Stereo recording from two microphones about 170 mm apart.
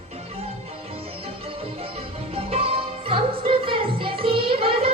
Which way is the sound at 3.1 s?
30° right (ahead or behind).